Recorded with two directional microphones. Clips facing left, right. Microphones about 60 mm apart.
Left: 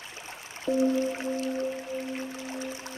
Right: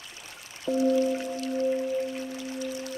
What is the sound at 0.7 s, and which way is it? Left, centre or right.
Music, left.